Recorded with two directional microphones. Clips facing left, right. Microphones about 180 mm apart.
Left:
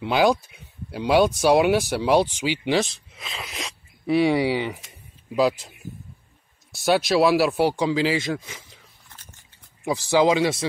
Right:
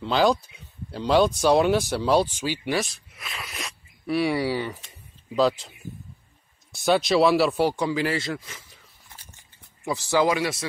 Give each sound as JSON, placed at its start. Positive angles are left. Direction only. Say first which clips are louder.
{"t": 0.0, "sound": "speech", "louder": "left 1 dB", "side_deg": 10}
{"t": 3.2, "sound": "a sound", "louder": "left 2 dB", "side_deg": 25}
{"t": 4.0, "sound": "speech", "louder": "left 4 dB", "side_deg": 20}
{"t": 6.7, "sound": "speech", "louder": "left 1 dB", "side_deg": 5}
{"t": 10.0, "sound": "speech", "louder": "left 4 dB", "side_deg": 15}